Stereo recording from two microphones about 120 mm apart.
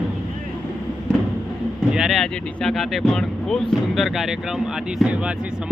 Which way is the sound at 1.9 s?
5° right (ahead or behind).